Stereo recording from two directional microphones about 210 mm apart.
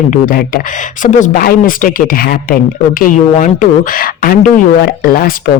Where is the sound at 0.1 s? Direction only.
45° left (ahead or behind).